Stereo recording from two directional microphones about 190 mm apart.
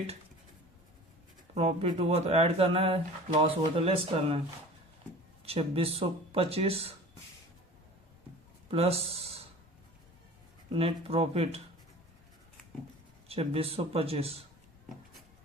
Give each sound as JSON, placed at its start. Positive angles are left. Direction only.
{"t": 1.5, "sound": "speech", "side_deg": -35}
{"t": 5.5, "sound": "speech", "side_deg": -30}
{"t": 8.7, "sound": "speech", "side_deg": -30}
{"t": 10.7, "sound": "speech", "side_deg": -30}
{"t": 13.2, "sound": "speech", "side_deg": -30}